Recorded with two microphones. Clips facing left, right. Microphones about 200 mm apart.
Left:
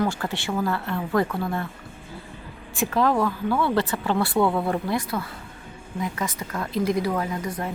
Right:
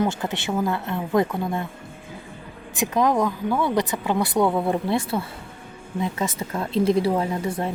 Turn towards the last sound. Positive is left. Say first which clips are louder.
# right 3 dB
turn(degrees=-30)  # may be behind; listen again after turning